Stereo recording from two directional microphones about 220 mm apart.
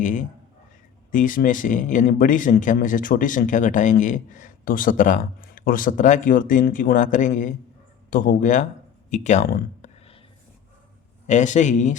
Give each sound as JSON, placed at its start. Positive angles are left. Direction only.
{"t": 0.0, "sound": "speech", "side_deg": 35}
{"t": 9.0, "sound": "a sound", "side_deg": 35}
{"t": 11.3, "sound": "speech", "side_deg": 35}